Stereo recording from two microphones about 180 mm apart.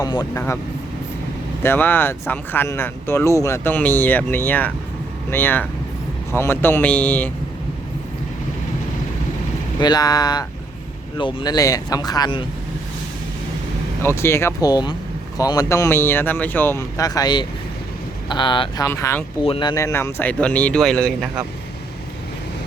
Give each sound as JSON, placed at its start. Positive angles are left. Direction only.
{"t": 0.0, "sound": "speech", "side_deg": 20}
{"t": 1.6, "sound": "speech", "side_deg": 10}
{"t": 9.8, "sound": "speech", "side_deg": 20}
{"t": 14.0, "sound": "speech", "side_deg": 15}
{"t": 18.9, "sound": "speech", "side_deg": 15}
{"t": 19.5, "sound": "speech", "side_deg": 25}